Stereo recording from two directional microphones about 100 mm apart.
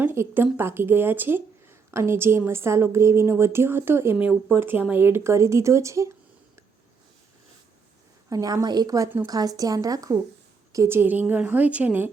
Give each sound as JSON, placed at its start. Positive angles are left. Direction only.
{"t": 0.0, "sound": "a woman's voice", "side_deg": -20}
{"t": 8.3, "sound": "a woman's voice", "side_deg": -35}